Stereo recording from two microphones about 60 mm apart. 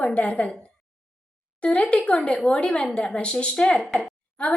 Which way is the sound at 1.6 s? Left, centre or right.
Centre.